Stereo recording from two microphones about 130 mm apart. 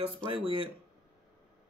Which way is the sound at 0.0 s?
45° right (ahead or behind).